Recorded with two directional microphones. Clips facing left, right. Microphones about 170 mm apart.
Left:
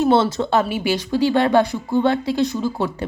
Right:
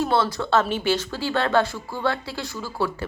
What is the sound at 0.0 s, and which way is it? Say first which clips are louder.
A woman's voice: left 6 dB; 25° left (ahead or behind).